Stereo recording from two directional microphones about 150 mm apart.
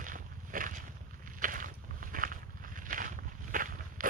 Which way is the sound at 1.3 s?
65° right (ahead or behind).